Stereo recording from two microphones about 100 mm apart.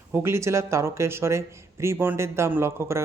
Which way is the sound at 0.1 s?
25° right (ahead or behind).